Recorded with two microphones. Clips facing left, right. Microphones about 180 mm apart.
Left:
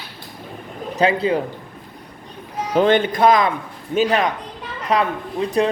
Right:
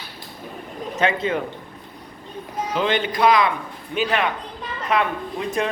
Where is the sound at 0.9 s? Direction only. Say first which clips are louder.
Left 4 dB; 35° left (ahead or behind).